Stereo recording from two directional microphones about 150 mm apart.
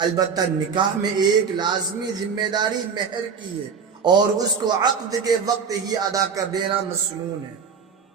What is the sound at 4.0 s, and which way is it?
A man's voice, 30° right (ahead or behind).